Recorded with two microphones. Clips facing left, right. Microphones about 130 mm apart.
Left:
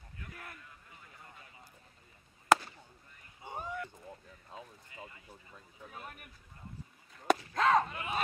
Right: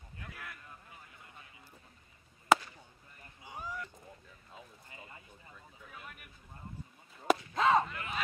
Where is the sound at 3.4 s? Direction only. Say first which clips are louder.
Left 3 dB; 50° left (ahead or behind).